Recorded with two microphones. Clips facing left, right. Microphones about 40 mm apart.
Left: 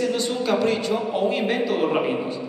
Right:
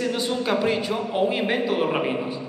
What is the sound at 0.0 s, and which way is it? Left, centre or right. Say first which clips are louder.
A man's voice: left 1 dB; centre.